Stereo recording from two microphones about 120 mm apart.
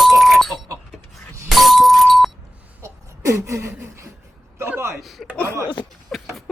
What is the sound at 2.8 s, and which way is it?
A man's voice, 25° right (ahead or behind).